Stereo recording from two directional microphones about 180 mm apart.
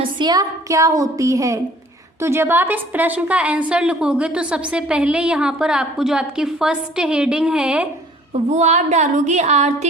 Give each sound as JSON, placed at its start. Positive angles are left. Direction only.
{"t": 0.0, "sound": "a woman's voice", "side_deg": -25}
{"t": 8.4, "sound": "a woman's voice", "side_deg": -40}